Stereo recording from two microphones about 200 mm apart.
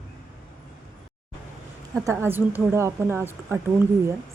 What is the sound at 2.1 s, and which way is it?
A woman's voice, 10° right (ahead or behind).